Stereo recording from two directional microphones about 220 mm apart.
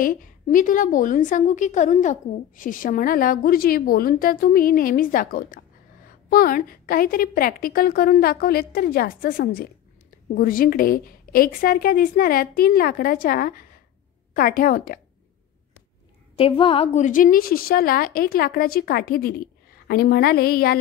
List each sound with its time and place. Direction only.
0.0 s a woman's voice: 40° left (ahead or behind)
16.3 s a woman's voice: 25° left (ahead or behind); by 20.7 s 45° left (ahead or behind)